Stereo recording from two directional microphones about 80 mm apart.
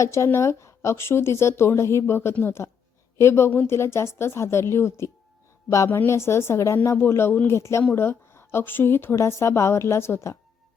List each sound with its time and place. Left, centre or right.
0.0 s a woman's voice: left